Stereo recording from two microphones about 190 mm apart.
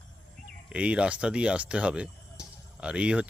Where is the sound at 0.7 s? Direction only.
5° right (ahead or behind).